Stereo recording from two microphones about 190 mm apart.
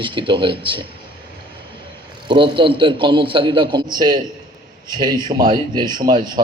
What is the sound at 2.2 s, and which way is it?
A man's voice, 25° right (ahead or behind).